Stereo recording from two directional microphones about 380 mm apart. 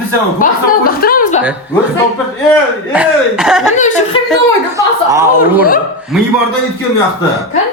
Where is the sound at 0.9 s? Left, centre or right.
Left.